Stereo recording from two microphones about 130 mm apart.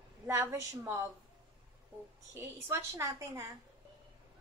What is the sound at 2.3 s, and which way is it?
A woman's voice, 20° right (ahead or behind).